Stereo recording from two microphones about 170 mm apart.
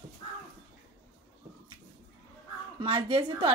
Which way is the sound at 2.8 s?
30° right (ahead or behind).